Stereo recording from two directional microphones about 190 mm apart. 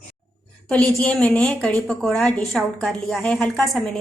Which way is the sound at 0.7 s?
5° left (ahead or behind).